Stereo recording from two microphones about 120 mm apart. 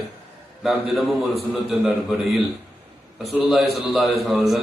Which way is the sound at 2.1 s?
Centre (ahead or behind).